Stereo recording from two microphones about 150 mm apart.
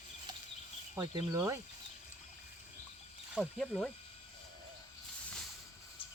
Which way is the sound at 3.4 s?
Centre (ahead or behind).